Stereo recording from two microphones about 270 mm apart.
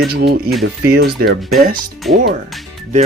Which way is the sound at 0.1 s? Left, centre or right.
Right.